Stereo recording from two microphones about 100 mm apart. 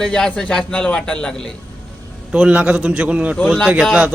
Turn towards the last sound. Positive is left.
turn(degrees=-5)  # may be behind; listen again after turning